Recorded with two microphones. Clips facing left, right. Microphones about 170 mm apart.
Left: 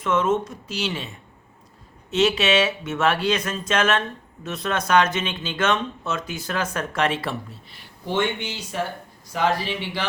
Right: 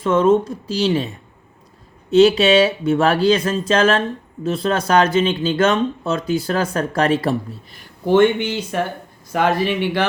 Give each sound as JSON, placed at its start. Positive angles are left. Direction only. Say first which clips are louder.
{"t": 0.0, "sound": "speech", "louder": "right 7 dB", "side_deg": -35}